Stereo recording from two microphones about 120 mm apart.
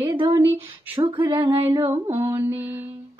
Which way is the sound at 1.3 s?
20° right (ahead or behind).